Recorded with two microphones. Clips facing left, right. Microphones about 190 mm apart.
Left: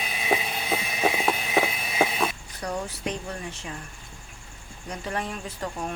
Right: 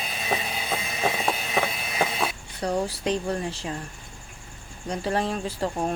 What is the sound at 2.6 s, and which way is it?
Speech, 35° right (ahead or behind).